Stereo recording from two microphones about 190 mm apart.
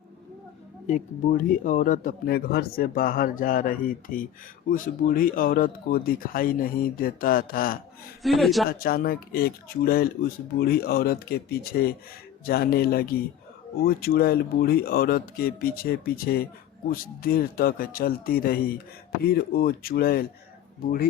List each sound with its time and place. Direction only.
0.9 s speech: 40° left (ahead or behind)
8.2 s a man's voice: centre (ahead or behind)
8.8 s speech: 50° left (ahead or behind)